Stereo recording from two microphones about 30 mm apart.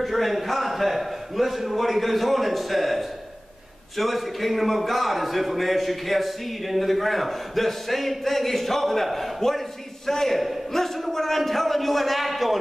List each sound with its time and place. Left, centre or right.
0.0 s a man's voice: centre